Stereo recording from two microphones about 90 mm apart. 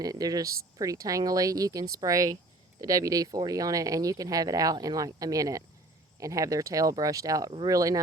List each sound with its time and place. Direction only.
0.0 s speech: 45° right (ahead or behind)